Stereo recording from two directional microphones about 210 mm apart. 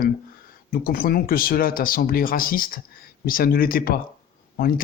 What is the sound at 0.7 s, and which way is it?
Speech, 45° left (ahead or behind).